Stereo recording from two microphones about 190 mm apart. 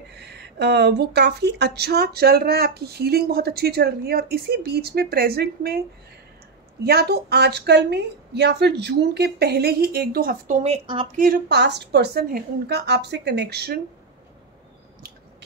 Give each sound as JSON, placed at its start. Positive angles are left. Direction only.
{"t": 0.1, "sound": "speech", "side_deg": -60}
{"t": 6.8, "sound": "speech", "side_deg": -55}
{"t": 11.1, "sound": "speech", "side_deg": -50}